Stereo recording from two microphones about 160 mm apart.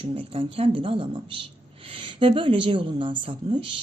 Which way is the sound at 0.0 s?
35° right (ahead or behind).